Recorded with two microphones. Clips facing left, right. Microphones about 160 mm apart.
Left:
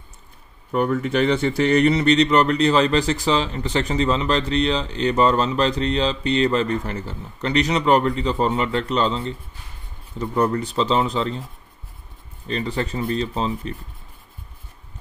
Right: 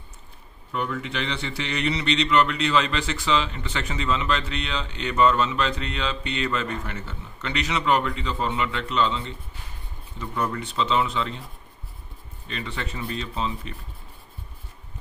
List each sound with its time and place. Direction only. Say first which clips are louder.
0.7 s speech: left 8 dB; 45° left (ahead or behind)
12.4 s speech: left 8 dB; 35° left (ahead or behind)